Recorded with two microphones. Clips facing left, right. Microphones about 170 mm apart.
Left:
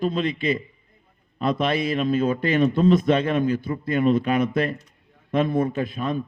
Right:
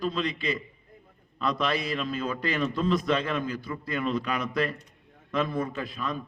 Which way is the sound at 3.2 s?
25° left (ahead or behind).